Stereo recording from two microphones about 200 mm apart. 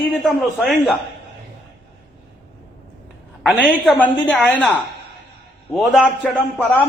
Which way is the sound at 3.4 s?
5° left (ahead or behind).